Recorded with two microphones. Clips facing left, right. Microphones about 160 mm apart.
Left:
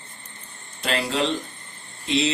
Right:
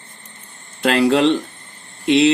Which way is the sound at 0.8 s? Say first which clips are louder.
Right 10 dB; 60° right (ahead or behind).